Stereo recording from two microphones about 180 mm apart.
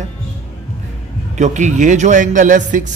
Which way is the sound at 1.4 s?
40° right (ahead or behind).